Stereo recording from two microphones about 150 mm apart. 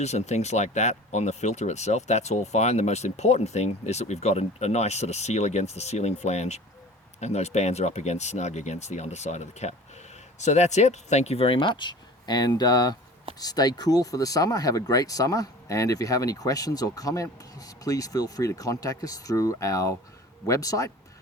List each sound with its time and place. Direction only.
0.0 s speech: 45° left (ahead or behind); by 20.9 s 20° left (ahead or behind)